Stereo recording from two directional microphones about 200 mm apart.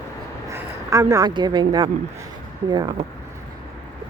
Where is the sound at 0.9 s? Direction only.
15° right (ahead or behind).